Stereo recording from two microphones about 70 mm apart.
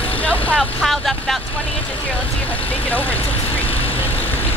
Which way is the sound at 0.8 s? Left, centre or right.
Centre.